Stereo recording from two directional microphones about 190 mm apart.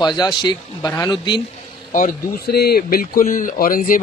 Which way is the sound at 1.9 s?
50° left (ahead or behind).